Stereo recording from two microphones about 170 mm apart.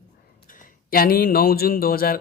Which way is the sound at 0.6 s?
60° left (ahead or behind).